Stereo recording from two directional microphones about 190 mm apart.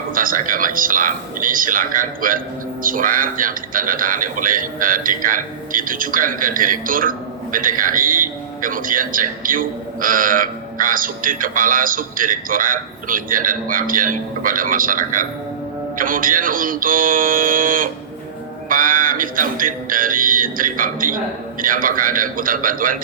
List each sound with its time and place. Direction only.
0.1 s speech: 45° right (ahead or behind)